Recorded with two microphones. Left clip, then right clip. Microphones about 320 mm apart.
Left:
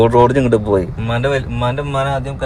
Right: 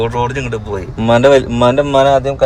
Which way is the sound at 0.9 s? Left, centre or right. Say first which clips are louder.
Right 9 dB; centre.